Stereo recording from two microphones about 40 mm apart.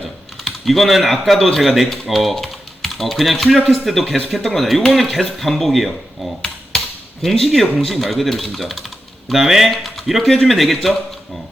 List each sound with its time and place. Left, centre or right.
0.4 s speech: centre
9.6 s speech: centre